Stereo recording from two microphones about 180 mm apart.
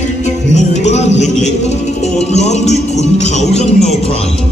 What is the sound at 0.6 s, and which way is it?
Music, 40° left (ahead or behind).